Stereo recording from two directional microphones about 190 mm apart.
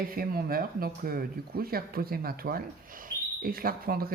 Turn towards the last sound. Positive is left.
turn(degrees=-50)  # may be behind; listen again after turning